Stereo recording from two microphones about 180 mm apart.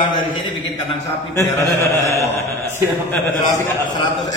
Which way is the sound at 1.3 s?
15° left (ahead or behind).